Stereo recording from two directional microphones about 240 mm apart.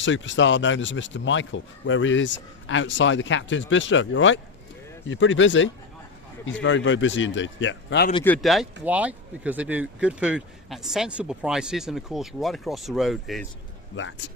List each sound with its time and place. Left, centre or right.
0.0 s speech: left
8.2 s speech: centre
13.9 s speech: left